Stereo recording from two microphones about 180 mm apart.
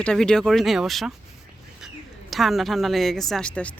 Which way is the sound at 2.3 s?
Centre (ahead or behind).